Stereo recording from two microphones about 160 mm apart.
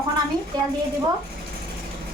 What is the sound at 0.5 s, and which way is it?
Speech, 25° right (ahead or behind).